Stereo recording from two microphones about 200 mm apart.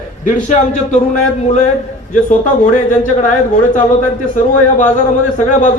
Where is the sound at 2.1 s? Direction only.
40° left (ahead or behind).